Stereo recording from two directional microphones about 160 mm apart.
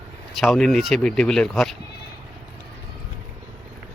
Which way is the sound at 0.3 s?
Centre (ahead or behind).